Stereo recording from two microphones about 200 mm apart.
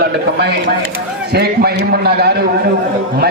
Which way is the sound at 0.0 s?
55° right (ahead or behind).